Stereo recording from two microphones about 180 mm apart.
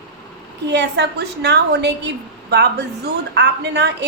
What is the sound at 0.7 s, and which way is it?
A woman's voice, 70° right (ahead or behind).